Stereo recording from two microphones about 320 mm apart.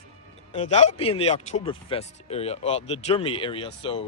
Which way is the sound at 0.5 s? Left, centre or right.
Left.